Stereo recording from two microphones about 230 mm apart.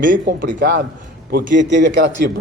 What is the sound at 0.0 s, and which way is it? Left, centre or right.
A man's voice, right.